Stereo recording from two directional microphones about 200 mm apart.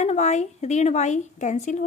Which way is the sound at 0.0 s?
35° left (ahead or behind).